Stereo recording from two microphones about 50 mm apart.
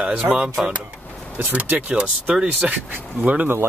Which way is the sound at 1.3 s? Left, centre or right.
Right.